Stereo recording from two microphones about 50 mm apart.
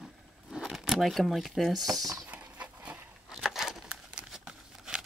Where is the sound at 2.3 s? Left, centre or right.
Right.